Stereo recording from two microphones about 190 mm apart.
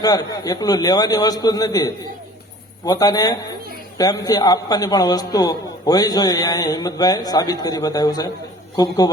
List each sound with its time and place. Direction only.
0.0 s a man's voice: 20° left (ahead or behind)